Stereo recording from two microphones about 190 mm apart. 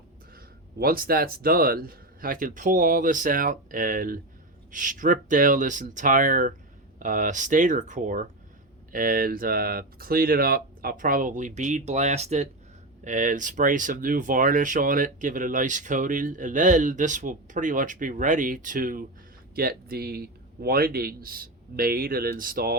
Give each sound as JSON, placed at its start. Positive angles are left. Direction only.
{"t": 0.3, "sound": "speech", "side_deg": -50}